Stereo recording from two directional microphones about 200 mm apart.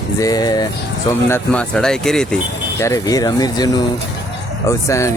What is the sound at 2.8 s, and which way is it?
Speech, 15° left (ahead or behind).